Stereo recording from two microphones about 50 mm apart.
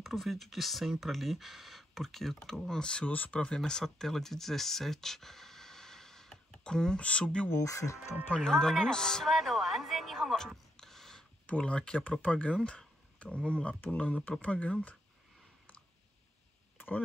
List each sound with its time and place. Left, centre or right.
0.0 s speech: centre
3.1 s speech: left
3.3 s speech: centre
7.5 s speech: left
8.4 s speech: centre
10.8 s a sound: centre
11.4 s speech: left
12.6 s a sound: left
13.5 s speech: left
16.7 s a sound: left